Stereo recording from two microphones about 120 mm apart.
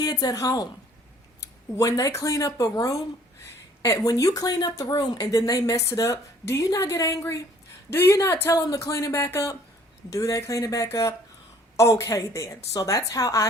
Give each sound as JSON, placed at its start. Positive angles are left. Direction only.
{"t": 0.0, "sound": "a woman's voice", "side_deg": 35}